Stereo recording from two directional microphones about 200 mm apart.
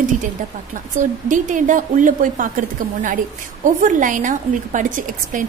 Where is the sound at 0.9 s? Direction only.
40° right (ahead or behind).